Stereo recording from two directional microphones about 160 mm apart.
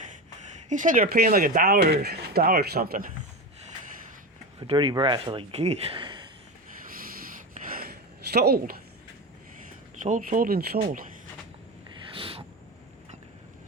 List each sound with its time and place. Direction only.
0.7 s speech: 55° right (ahead or behind)
4.6 s speech: 30° right (ahead or behind)
6.9 s a sound: 60° right (ahead or behind)
10.0 s speech: 55° right (ahead or behind); by 10.8 s 70° right (ahead or behind)
10.8 s speech: 55° right (ahead or behind)
12.1 s a sound: 35° right (ahead or behind)